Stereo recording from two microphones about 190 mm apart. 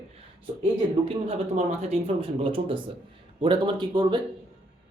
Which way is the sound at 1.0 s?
35° right (ahead or behind).